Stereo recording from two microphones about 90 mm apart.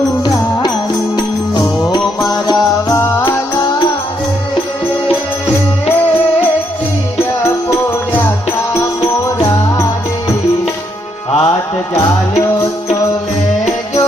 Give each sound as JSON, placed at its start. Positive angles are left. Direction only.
{"t": 1.1, "sound": "music", "side_deg": 50}
{"t": 2.9, "sound": "music", "side_deg": 30}
{"t": 11.3, "sound": "music", "side_deg": 90}
{"t": 11.9, "sound": "music", "side_deg": 35}